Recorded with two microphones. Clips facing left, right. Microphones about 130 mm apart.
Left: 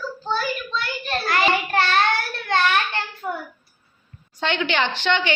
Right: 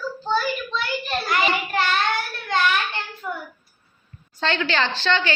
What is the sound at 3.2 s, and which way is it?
Child singing, 35° left (ahead or behind).